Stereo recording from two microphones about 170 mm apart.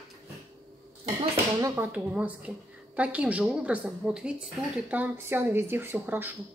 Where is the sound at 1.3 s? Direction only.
10° right (ahead or behind).